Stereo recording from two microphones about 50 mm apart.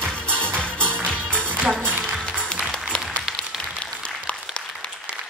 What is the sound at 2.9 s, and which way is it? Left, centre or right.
Applause, centre.